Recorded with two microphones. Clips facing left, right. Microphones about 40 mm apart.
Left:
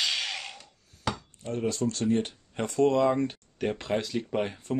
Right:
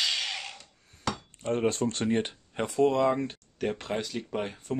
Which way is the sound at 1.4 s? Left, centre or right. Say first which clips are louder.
Right 2 dB; right.